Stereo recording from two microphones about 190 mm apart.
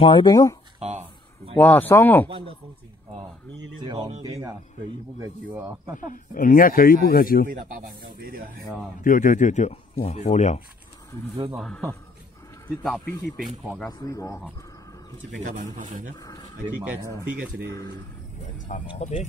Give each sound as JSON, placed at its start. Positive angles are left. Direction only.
{"t": 0.0, "sound": "speech", "side_deg": 25}
{"t": 0.7, "sound": "a sound", "side_deg": -35}
{"t": 1.6, "sound": "speech", "side_deg": 10}
{"t": 4.2, "sound": "speech", "side_deg": -20}
{"t": 6.3, "sound": "speech", "side_deg": 45}
{"t": 8.0, "sound": "speech", "side_deg": -50}
{"t": 9.0, "sound": "a man's voice", "side_deg": 45}
{"t": 11.5, "sound": "a man's voice", "side_deg": 0}
{"t": 13.8, "sound": "speech", "side_deg": 20}
{"t": 15.4, "sound": "speech", "side_deg": -40}
{"t": 16.2, "sound": "speech", "side_deg": 20}
{"t": 17.6, "sound": "speech", "side_deg": 20}
{"t": 18.7, "sound": "a man's voice", "side_deg": 40}